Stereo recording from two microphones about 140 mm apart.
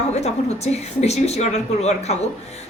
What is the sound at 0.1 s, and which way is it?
A man's voice, 50° left (ahead or behind).